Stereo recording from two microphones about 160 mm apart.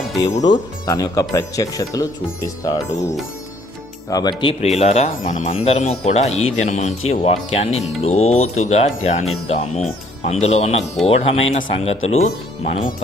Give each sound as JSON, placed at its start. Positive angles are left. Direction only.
{"t": 0.3, "sound": "speech", "side_deg": 50}
{"t": 0.9, "sound": "speech", "side_deg": 20}
{"t": 4.1, "sound": "speech", "side_deg": 25}